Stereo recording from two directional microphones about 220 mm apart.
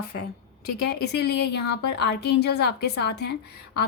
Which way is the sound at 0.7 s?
50° left (ahead or behind).